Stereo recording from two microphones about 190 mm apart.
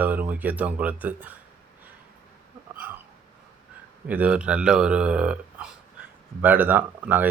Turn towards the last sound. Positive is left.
turn(degrees=-10)  # may be behind; listen again after turning